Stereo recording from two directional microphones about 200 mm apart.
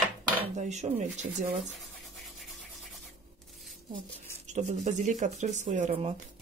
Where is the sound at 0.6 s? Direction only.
35° right (ahead or behind).